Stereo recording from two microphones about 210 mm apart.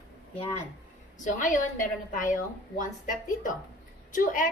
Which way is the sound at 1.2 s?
40° left (ahead or behind).